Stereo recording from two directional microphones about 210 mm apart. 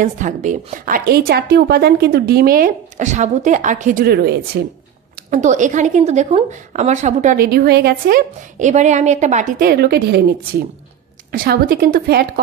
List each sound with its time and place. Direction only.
0.0 s a woman's voice: 35° right (ahead or behind)
5.3 s a woman's voice: 35° right (ahead or behind)
11.3 s a woman's voice: 45° right (ahead or behind)